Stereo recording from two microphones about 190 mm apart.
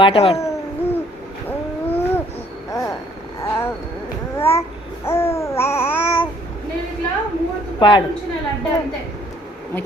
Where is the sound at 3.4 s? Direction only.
15° left (ahead or behind).